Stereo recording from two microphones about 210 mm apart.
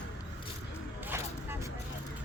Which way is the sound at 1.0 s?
10° right (ahead or behind).